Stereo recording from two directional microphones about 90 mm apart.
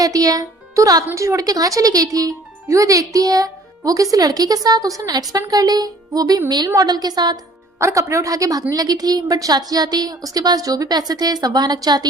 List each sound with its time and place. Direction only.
0.0 s a woman's voice: 40° right (ahead or behind)
7.8 s a woman's voice: 35° right (ahead or behind)